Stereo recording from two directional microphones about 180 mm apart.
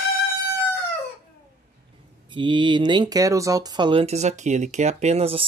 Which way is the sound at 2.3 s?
25° right (ahead or behind).